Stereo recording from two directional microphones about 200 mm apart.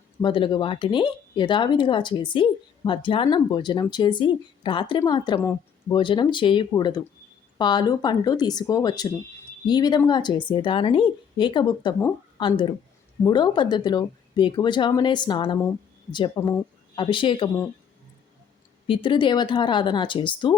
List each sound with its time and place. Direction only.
0.2 s speech: 25° left (ahead or behind)
18.9 s speech: 25° left (ahead or behind)